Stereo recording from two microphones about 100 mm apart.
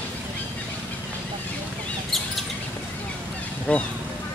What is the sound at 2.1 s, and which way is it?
Chirp, centre (ahead or behind).